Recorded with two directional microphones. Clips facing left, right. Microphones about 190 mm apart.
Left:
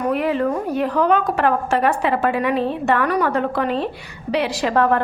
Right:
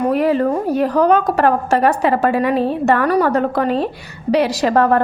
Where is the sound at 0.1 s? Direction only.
40° right (ahead or behind).